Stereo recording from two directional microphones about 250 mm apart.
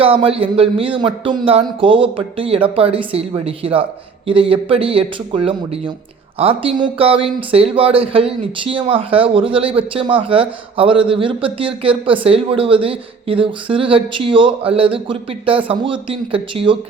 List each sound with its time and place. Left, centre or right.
0.0 s speech: right